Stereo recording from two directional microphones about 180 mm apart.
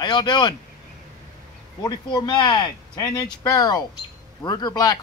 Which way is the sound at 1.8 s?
25° left (ahead or behind).